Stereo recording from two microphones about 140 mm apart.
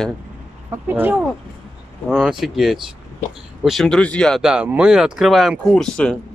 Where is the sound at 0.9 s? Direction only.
15° right (ahead or behind); by 4.4 s 5° left (ahead or behind).